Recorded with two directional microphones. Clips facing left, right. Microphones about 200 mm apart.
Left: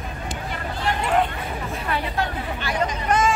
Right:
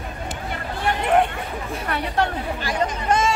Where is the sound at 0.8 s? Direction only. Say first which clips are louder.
Right 3 dB; 55° right (ahead or behind).